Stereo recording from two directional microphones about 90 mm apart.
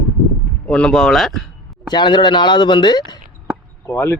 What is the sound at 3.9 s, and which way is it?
Speech, 35° left (ahead or behind).